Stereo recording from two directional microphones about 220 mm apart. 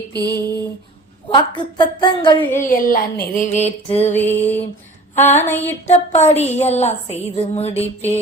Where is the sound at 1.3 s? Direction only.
20° left (ahead or behind).